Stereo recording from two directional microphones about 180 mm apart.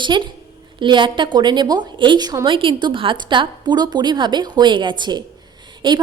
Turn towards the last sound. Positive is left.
turn(degrees=-25)  # may be behind; listen again after turning